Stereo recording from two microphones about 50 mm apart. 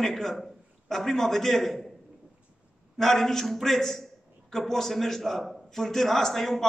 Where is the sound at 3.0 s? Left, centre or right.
Centre.